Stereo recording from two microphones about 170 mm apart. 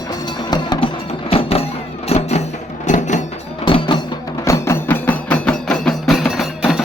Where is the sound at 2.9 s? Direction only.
45° left (ahead or behind).